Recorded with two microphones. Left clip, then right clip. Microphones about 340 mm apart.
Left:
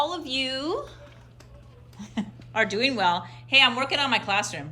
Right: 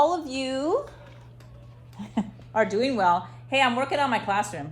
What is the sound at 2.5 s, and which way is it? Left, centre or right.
A woman's voice, centre.